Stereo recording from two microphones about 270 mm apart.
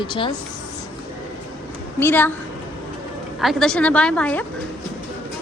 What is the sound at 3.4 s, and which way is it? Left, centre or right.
A woman's voice, centre.